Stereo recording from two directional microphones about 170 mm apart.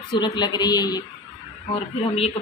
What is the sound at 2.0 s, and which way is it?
Speech, 35° left (ahead or behind).